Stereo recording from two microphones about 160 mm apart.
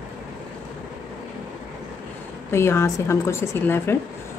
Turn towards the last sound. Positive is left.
turn(degrees=15)  # may be behind; listen again after turning